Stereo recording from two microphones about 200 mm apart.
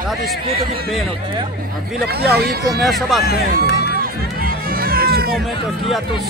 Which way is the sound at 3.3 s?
55° left (ahead or behind).